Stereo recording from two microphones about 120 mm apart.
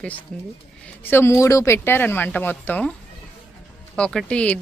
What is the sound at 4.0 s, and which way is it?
Speech, 5° left (ahead or behind).